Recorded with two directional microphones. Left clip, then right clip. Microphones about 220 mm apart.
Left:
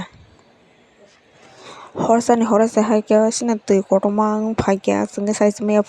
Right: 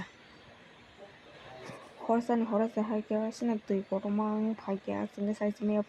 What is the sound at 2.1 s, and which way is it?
Speech, 40° left (ahead or behind).